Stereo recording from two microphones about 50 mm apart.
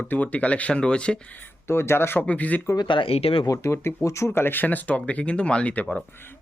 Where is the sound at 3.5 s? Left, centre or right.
Left.